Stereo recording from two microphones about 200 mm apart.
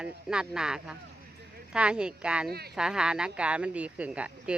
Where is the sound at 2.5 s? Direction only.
50° right (ahead or behind).